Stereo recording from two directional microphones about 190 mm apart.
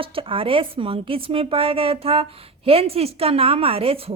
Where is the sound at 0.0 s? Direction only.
30° right (ahead or behind).